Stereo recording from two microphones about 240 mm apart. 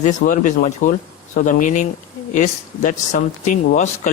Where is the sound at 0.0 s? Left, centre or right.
Left.